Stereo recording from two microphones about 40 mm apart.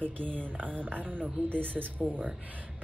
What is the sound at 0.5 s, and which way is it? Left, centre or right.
A woman's voice, right.